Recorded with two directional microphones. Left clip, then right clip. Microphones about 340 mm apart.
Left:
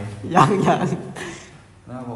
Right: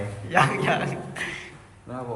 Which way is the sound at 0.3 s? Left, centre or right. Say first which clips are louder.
Left 5 dB; centre.